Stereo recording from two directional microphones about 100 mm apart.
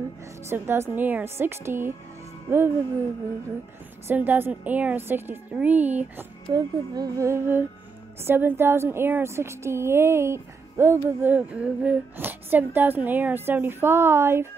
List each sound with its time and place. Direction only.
0.5 s a woman's voice: 25° right (ahead or behind)
4.1 s a woman's voice: 20° right (ahead or behind)
6.5 s a woman's voice: 40° right (ahead or behind)